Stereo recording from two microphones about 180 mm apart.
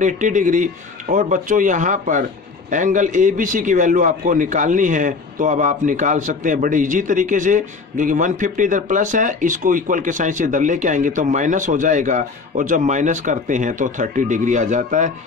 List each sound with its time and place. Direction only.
0.0 s a man's voice: 45° right (ahead or behind)